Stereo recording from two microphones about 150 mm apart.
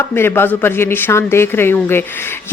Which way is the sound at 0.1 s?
15° left (ahead or behind).